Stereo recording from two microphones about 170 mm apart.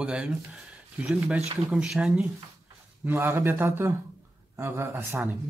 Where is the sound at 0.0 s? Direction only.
5° right (ahead or behind).